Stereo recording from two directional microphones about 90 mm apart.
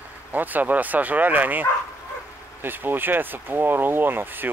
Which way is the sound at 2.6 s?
20° right (ahead or behind).